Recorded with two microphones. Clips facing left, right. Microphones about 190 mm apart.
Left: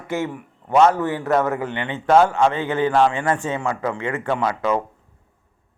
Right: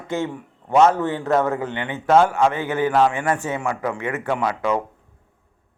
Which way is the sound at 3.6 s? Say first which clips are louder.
Left 1 dB; 15° right (ahead or behind).